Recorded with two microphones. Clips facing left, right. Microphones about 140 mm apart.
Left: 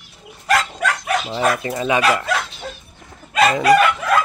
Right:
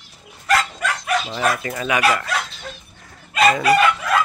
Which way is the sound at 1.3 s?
25° left (ahead or behind).